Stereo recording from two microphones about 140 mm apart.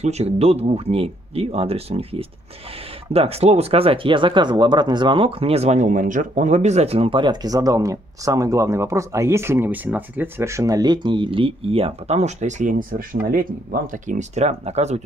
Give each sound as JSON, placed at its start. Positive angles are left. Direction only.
{"t": 0.0, "sound": "speech", "side_deg": -50}